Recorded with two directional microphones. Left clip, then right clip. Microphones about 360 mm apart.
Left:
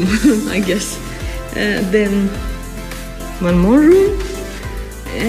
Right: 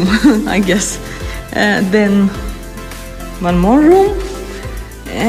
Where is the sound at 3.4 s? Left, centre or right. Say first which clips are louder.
Right 1 dB; centre.